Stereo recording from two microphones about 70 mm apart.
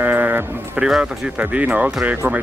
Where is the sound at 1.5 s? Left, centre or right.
Right.